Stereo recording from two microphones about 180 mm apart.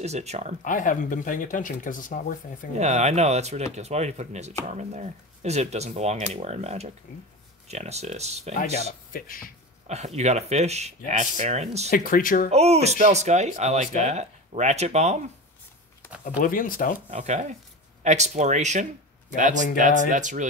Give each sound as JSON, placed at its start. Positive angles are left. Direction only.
{"t": 0.0, "sound": "speech", "side_deg": -35}
{"t": 0.6, "sound": "speech", "side_deg": 45}
{"t": 2.8, "sound": "speech", "side_deg": -40}
{"t": 9.1, "sound": "speech", "side_deg": 50}
{"t": 9.8, "sound": "speech", "side_deg": -40}
{"t": 11.9, "sound": "speech", "side_deg": 50}
{"t": 12.4, "sound": "speech", "side_deg": -35}
{"t": 16.3, "sound": "speech", "side_deg": 50}
{"t": 17.1, "sound": "speech", "side_deg": -40}